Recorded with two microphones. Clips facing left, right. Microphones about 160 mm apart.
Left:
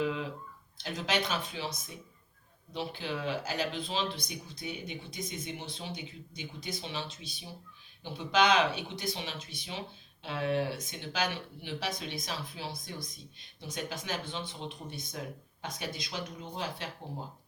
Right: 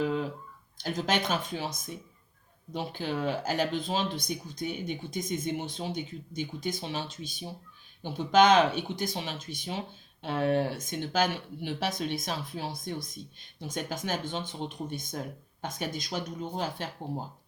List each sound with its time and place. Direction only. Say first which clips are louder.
0.0 s a sound: right 3 dB; 40° right (ahead or behind)
0.8 s speech: right 3 dB; 45° right (ahead or behind)
2.7 s speech: right 4 dB; 45° right (ahead or behind)